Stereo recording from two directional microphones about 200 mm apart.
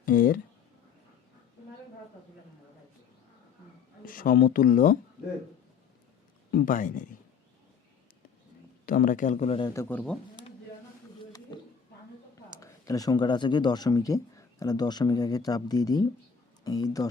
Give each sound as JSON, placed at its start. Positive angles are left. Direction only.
{"t": 0.0, "sound": "a sound", "side_deg": 45}
{"t": 4.0, "sound": "speech", "side_deg": 45}
{"t": 6.5, "sound": "speech", "side_deg": 45}
{"t": 8.9, "sound": "speech", "side_deg": 45}
{"t": 9.6, "sound": "a man's voice", "side_deg": 10}
{"t": 11.3, "sound": "a sound", "side_deg": 20}
{"t": 12.5, "sound": "speech", "side_deg": 15}